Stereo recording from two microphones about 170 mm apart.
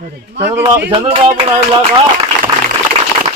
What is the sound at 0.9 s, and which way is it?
Speech, 35° right (ahead or behind).